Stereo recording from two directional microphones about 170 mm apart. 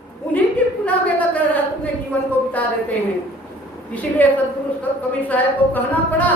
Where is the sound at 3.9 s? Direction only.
10° left (ahead or behind).